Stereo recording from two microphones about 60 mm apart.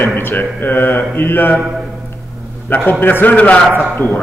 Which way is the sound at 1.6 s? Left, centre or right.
Centre.